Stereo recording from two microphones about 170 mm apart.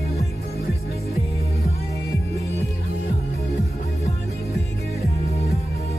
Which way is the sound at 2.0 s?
20° left (ahead or behind).